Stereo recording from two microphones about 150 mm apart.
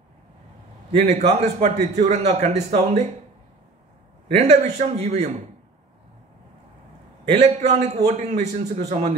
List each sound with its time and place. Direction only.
1.0 s a man's voice: 45° right (ahead or behind)
4.3 s a man's voice: 45° right (ahead or behind)
7.3 s a man's voice: 50° right (ahead or behind)